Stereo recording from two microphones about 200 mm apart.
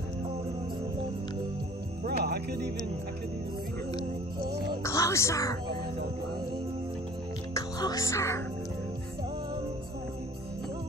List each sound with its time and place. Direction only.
2.0 s music: 50° right (ahead or behind)
4.8 s music: 15° left (ahead or behind)
7.5 s music: 15° left (ahead or behind)